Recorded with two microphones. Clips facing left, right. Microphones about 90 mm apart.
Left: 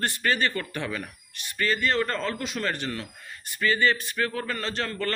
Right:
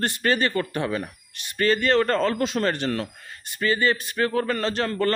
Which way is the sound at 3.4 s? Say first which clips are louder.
Right 1 dB; 30° right (ahead or behind).